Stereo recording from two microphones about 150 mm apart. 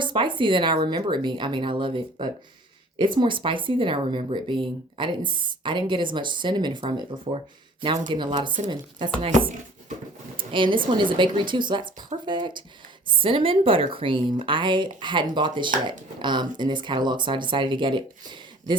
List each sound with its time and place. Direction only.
0.0 s speech: 30° right (ahead or behind)
10.3 s speech: 35° right (ahead or behind)